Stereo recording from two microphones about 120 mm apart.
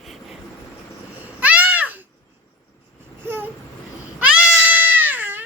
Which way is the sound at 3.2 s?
15° right (ahead or behind).